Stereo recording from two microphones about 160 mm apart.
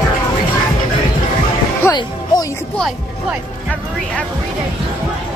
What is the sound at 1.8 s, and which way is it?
Music, 15° left (ahead or behind).